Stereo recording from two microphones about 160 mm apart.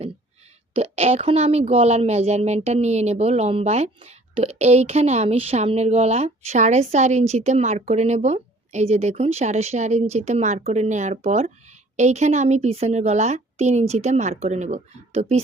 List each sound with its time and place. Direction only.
0.7 s speech: 40° right (ahead or behind)